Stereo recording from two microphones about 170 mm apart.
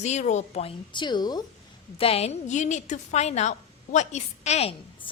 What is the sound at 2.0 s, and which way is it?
A woman's voice, 35° left (ahead or behind).